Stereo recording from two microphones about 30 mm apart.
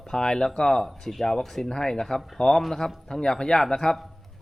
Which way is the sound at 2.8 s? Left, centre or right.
Centre.